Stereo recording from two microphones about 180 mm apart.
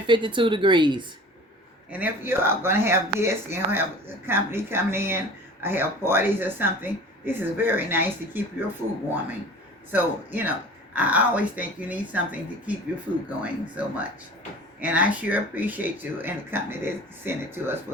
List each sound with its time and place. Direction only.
0.1 s speech: 25° right (ahead or behind)
1.9 s speech: 10° right (ahead or behind)
9.9 s speech: 10° right (ahead or behind)